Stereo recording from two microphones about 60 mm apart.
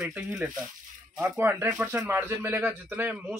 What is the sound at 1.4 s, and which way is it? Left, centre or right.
A man's voice, right.